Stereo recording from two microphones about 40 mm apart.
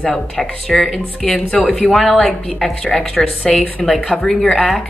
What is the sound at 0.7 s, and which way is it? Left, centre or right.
Speech, centre.